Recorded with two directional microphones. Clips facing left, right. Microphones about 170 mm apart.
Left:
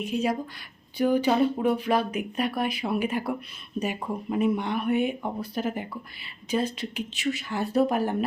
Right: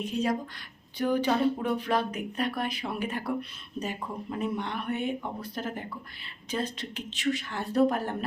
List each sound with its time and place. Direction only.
0.0 s speech: 10° left (ahead or behind)